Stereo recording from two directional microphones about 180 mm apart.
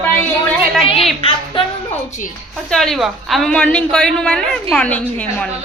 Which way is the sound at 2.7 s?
Centre (ahead or behind).